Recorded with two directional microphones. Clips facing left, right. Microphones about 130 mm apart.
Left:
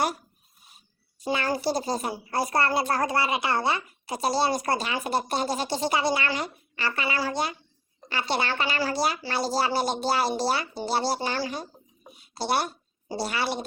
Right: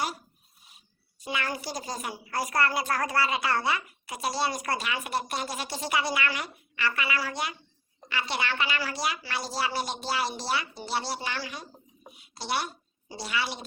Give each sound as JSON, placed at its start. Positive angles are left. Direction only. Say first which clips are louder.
{"t": 1.2, "sound": "a woman's voice", "louder": "left 7 dB", "side_deg": 35}